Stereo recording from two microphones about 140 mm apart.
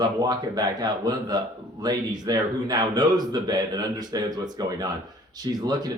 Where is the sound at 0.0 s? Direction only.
30° right (ahead or behind).